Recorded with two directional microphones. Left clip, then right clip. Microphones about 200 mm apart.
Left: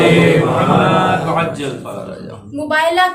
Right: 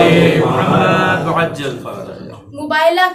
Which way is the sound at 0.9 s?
15° right (ahead or behind).